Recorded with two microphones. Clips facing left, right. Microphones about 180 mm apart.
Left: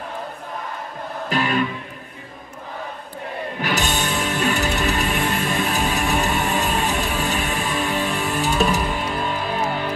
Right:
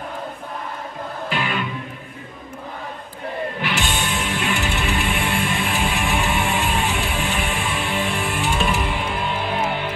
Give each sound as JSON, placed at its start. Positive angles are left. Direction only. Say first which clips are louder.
{"t": 1.3, "sound": "music", "louder": "left 4 dB", "side_deg": 40}
{"t": 3.6, "sound": "music", "louder": "left 4 dB", "side_deg": 40}